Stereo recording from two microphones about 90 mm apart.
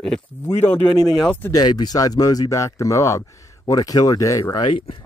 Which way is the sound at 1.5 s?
50° left (ahead or behind).